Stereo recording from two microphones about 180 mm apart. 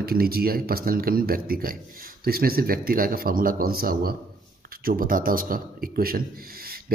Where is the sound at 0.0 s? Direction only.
55° right (ahead or behind).